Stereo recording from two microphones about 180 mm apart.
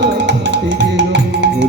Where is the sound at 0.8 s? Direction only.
85° right.